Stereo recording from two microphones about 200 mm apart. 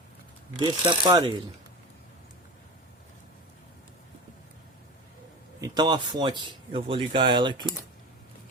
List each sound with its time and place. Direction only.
0.6 s a man's voice: 20° right (ahead or behind)
5.5 s a man's voice: 20° right (ahead or behind)